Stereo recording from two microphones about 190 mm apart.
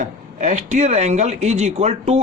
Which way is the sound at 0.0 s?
40° right (ahead or behind).